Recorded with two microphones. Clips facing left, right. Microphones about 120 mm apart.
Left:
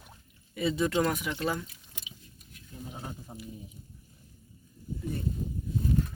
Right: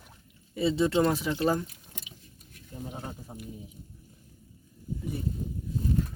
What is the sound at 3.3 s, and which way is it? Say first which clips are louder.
Speech: right 1 dB; centre (ahead or behind).